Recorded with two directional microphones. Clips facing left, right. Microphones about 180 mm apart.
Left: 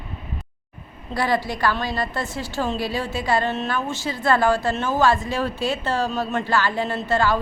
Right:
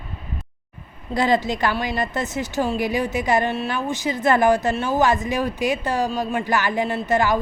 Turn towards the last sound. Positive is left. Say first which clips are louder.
# right 1 dB
turn(degrees=-20)  # may be behind; listen again after turning